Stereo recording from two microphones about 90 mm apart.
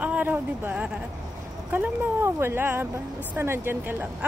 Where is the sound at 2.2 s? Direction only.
25° right (ahead or behind).